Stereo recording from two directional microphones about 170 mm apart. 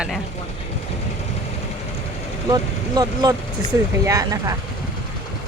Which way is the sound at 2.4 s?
20° right (ahead or behind).